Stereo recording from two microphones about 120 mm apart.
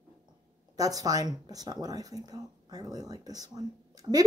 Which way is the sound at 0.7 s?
30° right (ahead or behind).